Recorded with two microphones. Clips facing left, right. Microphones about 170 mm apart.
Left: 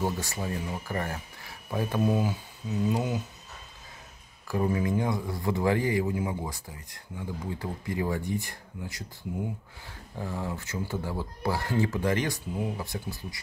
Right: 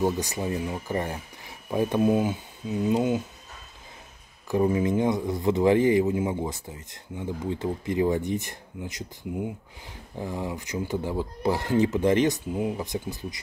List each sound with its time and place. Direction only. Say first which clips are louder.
0.0 s a man's voice: right 5 dB; 20° right (ahead or behind)
4.5 s a man's voice: right 4 dB; 20° right (ahead or behind)